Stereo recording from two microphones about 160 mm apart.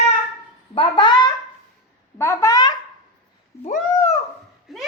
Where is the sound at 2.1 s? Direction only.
15° left (ahead or behind).